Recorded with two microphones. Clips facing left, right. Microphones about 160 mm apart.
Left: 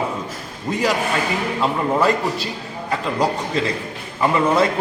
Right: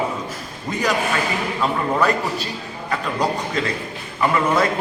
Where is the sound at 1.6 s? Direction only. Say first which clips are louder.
Left 1 dB; 25° left (ahead or behind).